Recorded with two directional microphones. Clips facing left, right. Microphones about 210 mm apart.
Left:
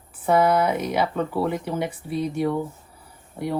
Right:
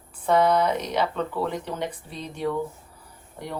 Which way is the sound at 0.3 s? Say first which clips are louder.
Left 1 dB; 5° left (ahead or behind).